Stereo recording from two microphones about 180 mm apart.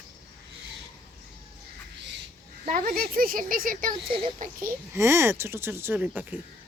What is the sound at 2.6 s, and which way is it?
Speech, 50° right (ahead or behind).